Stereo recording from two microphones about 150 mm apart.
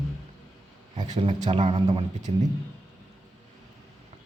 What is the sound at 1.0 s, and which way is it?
Speech, 50° right (ahead or behind).